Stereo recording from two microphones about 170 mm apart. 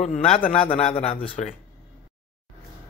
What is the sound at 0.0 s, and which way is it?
A man's voice, 45° left (ahead or behind).